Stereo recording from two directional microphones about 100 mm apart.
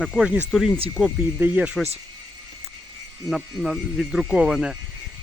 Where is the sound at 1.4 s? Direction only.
15° right (ahead or behind).